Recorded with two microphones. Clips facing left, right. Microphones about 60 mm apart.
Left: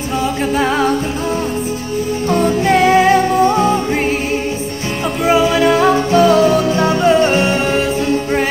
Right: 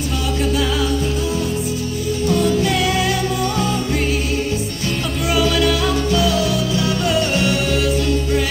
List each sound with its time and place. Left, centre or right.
0.6 s music: left
2.2 s music: left
5.2 s music: left